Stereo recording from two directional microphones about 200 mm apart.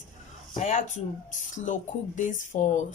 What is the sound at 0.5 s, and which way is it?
Speech, 40° left (ahead or behind).